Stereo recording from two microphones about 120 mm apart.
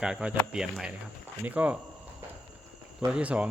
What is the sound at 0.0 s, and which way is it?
Cricket, 5° right (ahead or behind).